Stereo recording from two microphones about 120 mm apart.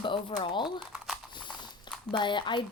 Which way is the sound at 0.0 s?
40° left (ahead or behind).